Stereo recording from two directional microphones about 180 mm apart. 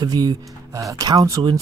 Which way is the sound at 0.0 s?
20° right (ahead or behind).